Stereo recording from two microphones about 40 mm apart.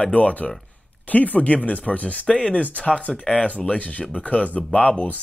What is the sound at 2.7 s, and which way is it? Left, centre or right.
Speech, left.